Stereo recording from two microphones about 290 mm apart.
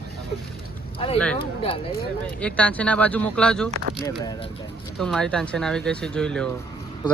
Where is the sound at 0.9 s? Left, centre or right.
Centre.